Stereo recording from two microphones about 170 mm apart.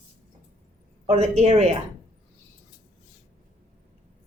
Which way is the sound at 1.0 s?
40° right (ahead or behind).